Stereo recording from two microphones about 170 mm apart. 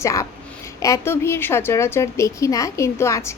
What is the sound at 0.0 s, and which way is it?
A woman's voice, 20° left (ahead or behind).